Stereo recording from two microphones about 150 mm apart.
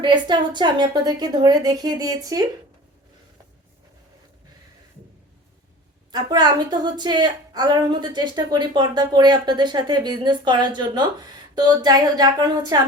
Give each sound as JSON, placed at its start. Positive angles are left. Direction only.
{"t": 0.0, "sound": "a woman's voice", "side_deg": -30}
{"t": 6.1, "sound": "a woman's voice", "side_deg": -30}